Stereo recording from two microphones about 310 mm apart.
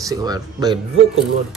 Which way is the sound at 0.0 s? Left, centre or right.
Centre.